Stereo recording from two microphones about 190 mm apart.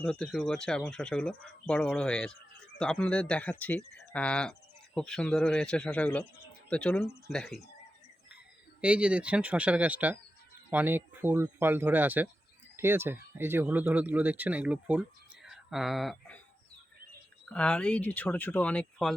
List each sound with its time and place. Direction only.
0.0 s speech: 5° left (ahead or behind)
8.8 s speech: 5° right (ahead or behind)
15.4 s a sound: centre (ahead or behind)
17.5 s speech: 5° left (ahead or behind)